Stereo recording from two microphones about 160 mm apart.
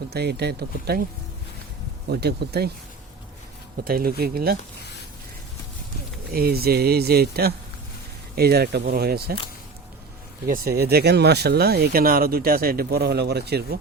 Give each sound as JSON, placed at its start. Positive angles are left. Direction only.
{"t": 0.1, "sound": "speech", "side_deg": -90}
{"t": 2.0, "sound": "speech", "side_deg": -85}
{"t": 3.8, "sound": "speech", "side_deg": -65}
{"t": 6.3, "sound": "speech", "side_deg": -70}
{"t": 10.4, "sound": "speech", "side_deg": -70}